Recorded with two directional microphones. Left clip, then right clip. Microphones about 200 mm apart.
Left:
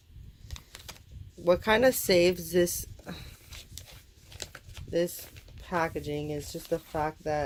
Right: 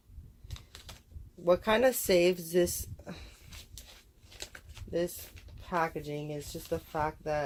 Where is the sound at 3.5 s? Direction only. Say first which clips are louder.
Left 4 dB; 50° left (ahead or behind).